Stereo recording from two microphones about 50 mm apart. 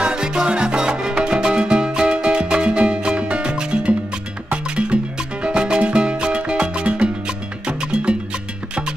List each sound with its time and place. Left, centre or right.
0.0 s salsa music: centre
4.5 s music: right